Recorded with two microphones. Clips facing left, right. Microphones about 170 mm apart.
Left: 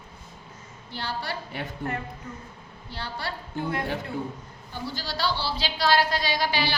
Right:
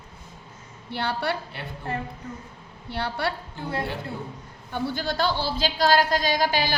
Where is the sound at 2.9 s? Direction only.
65° right (ahead or behind).